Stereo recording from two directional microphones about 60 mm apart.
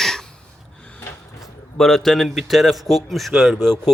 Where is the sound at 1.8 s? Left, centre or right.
Centre.